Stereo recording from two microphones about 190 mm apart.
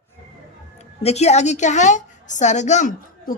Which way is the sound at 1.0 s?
35° left (ahead or behind).